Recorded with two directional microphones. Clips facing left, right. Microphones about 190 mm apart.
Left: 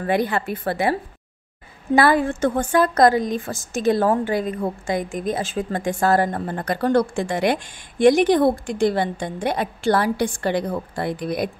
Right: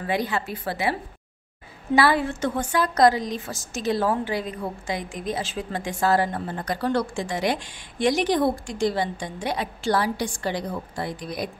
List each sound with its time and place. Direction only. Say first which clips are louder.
0.0 s a woman's voice: left 5 dB; 55° left (ahead or behind)
2.0 s a woman's voice: left 4 dB; 50° left (ahead or behind)